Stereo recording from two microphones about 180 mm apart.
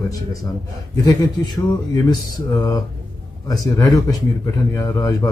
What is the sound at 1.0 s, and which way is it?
Speech, 25° left (ahead or behind).